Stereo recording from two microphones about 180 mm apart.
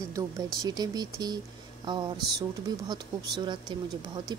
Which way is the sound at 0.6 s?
20° right (ahead or behind).